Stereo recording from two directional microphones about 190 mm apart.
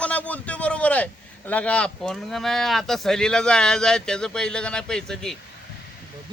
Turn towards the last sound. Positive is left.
turn(degrees=5)  # may be behind; listen again after turning